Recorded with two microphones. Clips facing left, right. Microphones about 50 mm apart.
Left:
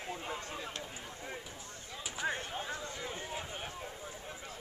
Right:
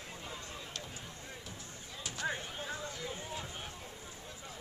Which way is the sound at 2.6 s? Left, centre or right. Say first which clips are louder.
Left 2 dB; centre.